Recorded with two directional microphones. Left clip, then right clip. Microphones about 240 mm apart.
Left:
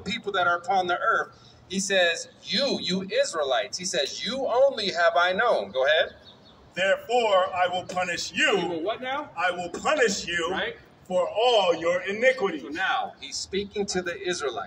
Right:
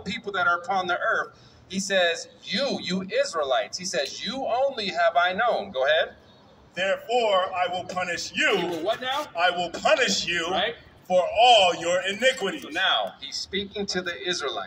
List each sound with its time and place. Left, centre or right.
0.0 s a man's voice: centre
5.7 s a man's voice: centre
8.8 s a man's voice: right
12.8 s a man's voice: right
13.3 s a man's voice: centre